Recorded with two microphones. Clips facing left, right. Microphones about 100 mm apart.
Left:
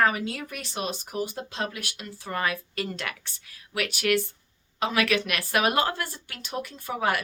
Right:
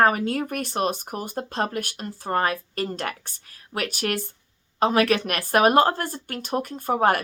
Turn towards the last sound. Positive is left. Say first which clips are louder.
# right 6 dB
turn(degrees=-45)  # may be behind; listen again after turning